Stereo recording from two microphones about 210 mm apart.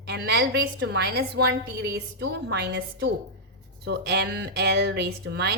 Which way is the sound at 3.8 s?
50° right (ahead or behind).